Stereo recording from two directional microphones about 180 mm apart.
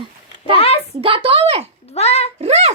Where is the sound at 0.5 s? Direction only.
35° left (ahead or behind).